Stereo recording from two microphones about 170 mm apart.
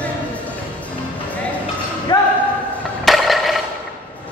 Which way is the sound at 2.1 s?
25° left (ahead or behind).